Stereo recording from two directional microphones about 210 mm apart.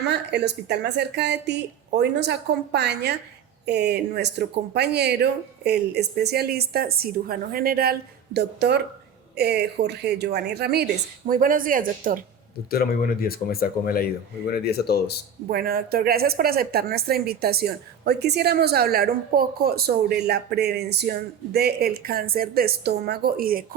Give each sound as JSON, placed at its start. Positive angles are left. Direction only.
{"t": 0.0, "sound": "a woman's voice", "side_deg": -55}
{"t": 12.7, "sound": "speech", "side_deg": 45}
{"t": 15.4, "sound": "a woman's voice", "side_deg": -45}